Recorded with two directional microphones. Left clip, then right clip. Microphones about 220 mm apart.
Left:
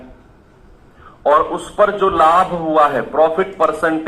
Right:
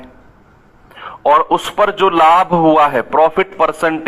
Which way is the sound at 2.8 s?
40° right (ahead or behind).